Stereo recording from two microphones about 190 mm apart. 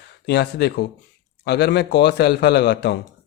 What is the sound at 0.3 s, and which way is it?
A man's voice, 60° left (ahead or behind).